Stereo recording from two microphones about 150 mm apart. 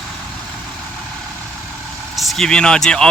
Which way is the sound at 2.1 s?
Centre (ahead or behind).